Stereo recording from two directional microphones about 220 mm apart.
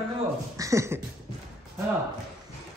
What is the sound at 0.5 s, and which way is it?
Beatboxing, 15° right (ahead or behind).